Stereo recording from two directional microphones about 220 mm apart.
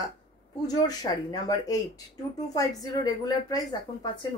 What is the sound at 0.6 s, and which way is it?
A woman's voice, 15° left (ahead or behind).